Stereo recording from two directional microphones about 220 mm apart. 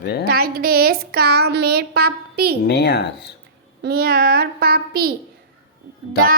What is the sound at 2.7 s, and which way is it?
Speech, 50° left (ahead or behind).